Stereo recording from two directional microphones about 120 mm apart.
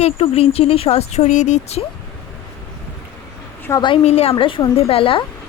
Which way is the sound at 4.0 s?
60° left (ahead or behind).